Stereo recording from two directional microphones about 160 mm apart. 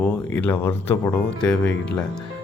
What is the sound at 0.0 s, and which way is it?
Speech, 10° left (ahead or behind).